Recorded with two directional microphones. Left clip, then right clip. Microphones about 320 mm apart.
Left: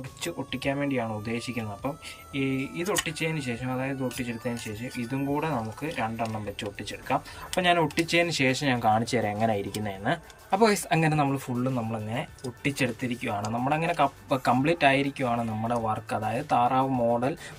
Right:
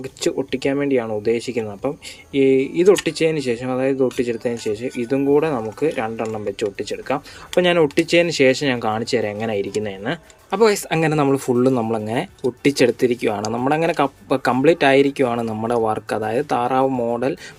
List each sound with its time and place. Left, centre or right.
0.2 s speech: centre